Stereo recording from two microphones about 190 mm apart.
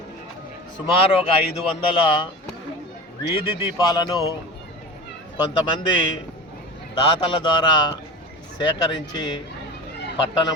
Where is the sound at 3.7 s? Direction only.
20° left (ahead or behind).